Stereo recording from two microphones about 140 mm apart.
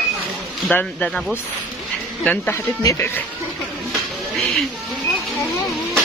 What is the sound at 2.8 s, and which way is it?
Speech, 25° left (ahead or behind).